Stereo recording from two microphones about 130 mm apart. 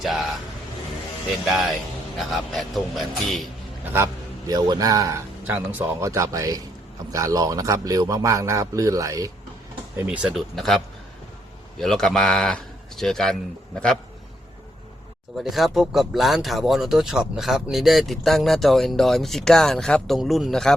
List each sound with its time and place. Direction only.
0.0 s vehicle: centre (ahead or behind)
1.5 s speech: centre (ahead or behind)
3.8 s a man's voice: 20° right (ahead or behind)
5.5 s a man's voice: 15° right (ahead or behind)
10.1 s speech: 5° right (ahead or behind)
15.4 s speech: centre (ahead or behind)